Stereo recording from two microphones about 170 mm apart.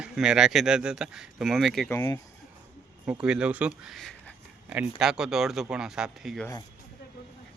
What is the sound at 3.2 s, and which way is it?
Speech, 5° right (ahead or behind).